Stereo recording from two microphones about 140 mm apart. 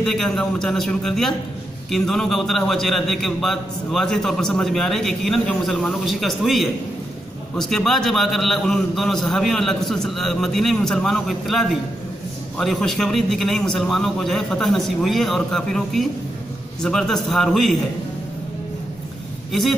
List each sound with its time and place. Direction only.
0.0 s a man's voice: 5° left (ahead or behind)